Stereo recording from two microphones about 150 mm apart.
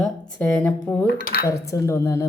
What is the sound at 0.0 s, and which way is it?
Speech, 5° left (ahead or behind).